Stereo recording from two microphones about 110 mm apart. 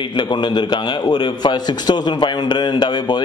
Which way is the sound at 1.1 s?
40° left (ahead or behind).